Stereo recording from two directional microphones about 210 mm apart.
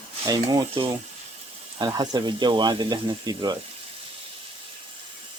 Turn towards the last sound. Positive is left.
turn(degrees=-20)  # may be behind; listen again after turning